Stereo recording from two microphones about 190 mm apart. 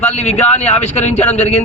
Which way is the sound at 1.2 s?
10° left (ahead or behind).